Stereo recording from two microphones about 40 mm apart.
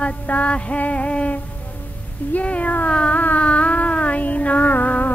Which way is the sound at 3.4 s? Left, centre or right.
Left.